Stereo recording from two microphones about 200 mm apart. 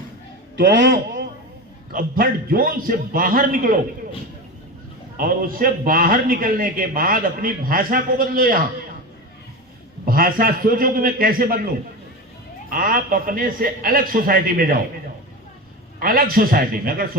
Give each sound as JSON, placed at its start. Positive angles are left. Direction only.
{"t": 1.9, "sound": "a man's voice", "side_deg": -45}
{"t": 5.1, "sound": "a man's voice", "side_deg": -45}
{"t": 10.1, "sound": "a man's voice", "side_deg": -45}
{"t": 12.7, "sound": "a man's voice", "side_deg": -45}
{"t": 16.0, "sound": "a man's voice", "side_deg": -45}